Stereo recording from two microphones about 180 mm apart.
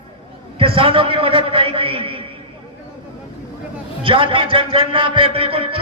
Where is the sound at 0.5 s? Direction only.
30° right (ahead or behind).